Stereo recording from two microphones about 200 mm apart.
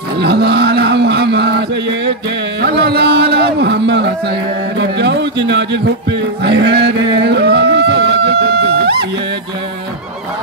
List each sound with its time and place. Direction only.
0.2 s chant: 55° right (ahead or behind)
2.6 s a man's voice: 55° right (ahead or behind)